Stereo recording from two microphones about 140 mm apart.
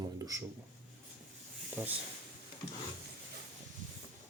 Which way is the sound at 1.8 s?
10° right (ahead or behind).